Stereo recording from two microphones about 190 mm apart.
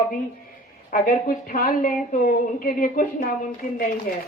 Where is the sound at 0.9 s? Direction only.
45° left (ahead or behind).